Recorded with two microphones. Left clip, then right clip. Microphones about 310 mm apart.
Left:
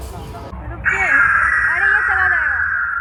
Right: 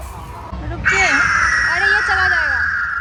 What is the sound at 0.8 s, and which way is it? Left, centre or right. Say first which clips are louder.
Crow: even; centre.